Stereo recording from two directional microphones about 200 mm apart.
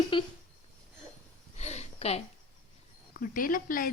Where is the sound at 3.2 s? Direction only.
45° left (ahead or behind).